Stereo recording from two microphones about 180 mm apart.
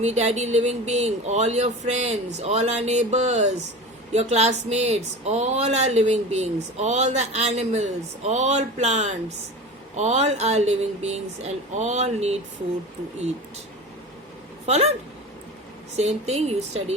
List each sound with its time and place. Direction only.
0.0 s speech: 40° right (ahead or behind)
14.7 s speech: 35° right (ahead or behind)
16.0 s speech: 35° right (ahead or behind)